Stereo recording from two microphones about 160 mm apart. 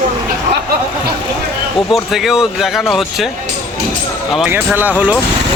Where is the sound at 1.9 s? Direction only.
Centre (ahead or behind).